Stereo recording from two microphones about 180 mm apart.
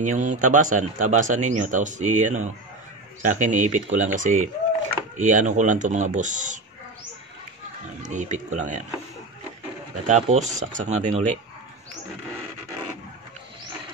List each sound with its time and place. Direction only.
0.0 s a man's voice: 45° right (ahead or behind)
8.0 s a man's voice: 40° right (ahead or behind)
10.0 s a man's voice: 40° right (ahead or behind)